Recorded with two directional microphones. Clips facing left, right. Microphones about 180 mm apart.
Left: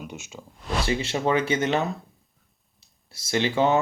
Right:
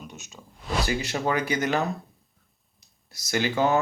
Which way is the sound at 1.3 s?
25° left (ahead or behind).